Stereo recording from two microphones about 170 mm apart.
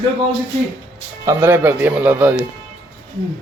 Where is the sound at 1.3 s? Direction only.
15° right (ahead or behind).